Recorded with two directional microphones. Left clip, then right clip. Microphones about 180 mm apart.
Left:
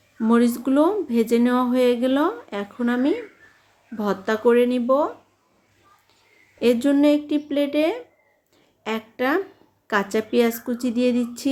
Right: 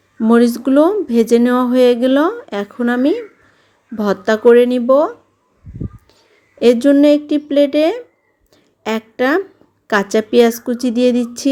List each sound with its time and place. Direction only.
0.2 s speech: 35° right (ahead or behind)
6.6 s a woman's voice: 35° right (ahead or behind)